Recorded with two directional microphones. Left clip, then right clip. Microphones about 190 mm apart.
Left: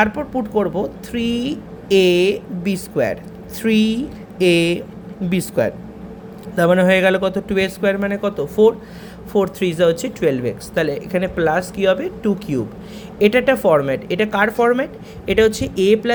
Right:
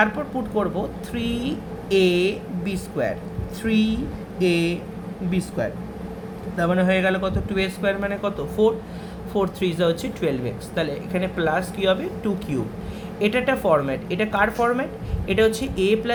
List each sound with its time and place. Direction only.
0.0 s a woman's voice: 35° left (ahead or behind)